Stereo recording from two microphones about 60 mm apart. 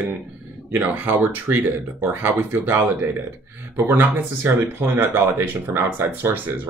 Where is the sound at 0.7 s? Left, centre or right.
Right.